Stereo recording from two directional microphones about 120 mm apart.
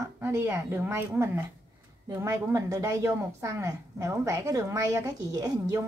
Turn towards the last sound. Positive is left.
turn(degrees=-30)  # may be behind; listen again after turning